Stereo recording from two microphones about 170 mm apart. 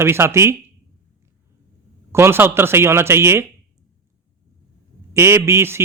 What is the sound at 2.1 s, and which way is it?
Speech, 15° right (ahead or behind).